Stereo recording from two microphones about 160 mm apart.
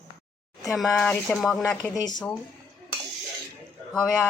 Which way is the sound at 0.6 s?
Centre (ahead or behind).